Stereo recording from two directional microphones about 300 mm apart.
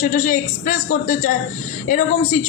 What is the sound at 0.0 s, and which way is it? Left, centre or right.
A woman's voice, left.